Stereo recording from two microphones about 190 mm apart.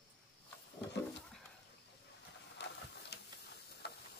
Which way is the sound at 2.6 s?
65° left (ahead or behind).